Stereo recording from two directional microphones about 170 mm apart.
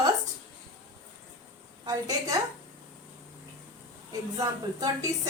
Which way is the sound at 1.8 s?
20° right (ahead or behind).